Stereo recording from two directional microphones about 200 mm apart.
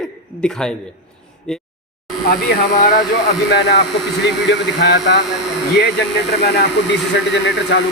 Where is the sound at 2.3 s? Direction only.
45° left (ahead or behind).